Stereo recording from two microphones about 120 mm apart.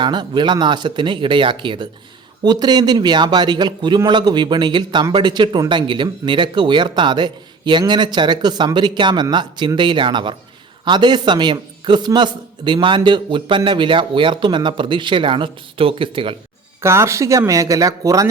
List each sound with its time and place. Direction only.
0.0 s speech: 40° right (ahead or behind)
16.8 s speech: 25° right (ahead or behind)